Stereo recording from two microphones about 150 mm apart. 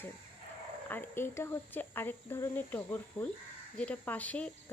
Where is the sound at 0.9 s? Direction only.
15° left (ahead or behind).